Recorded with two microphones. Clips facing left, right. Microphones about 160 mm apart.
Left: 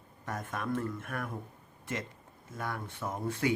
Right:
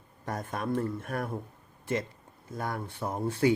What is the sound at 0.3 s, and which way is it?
Speech, 35° right (ahead or behind).